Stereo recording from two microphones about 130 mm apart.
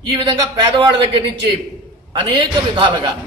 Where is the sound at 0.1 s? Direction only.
35° right (ahead or behind).